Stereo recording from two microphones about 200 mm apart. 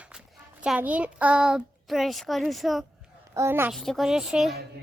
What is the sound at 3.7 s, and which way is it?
Speech, centre (ahead or behind).